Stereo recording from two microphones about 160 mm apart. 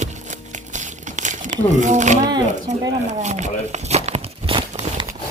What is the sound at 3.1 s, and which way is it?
Speech, 45° right (ahead or behind).